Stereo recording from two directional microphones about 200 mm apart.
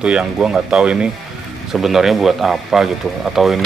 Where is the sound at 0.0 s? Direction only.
5° right (ahead or behind).